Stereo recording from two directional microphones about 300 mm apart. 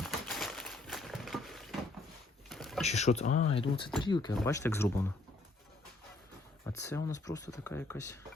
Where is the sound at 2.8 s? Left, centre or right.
Left.